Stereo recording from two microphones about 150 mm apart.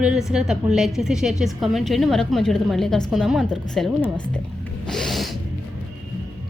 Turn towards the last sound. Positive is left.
turn(degrees=0)  # may be behind; listen again after turning